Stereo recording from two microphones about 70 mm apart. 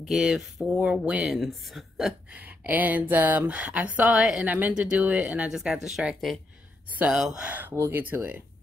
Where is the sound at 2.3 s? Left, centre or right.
Right.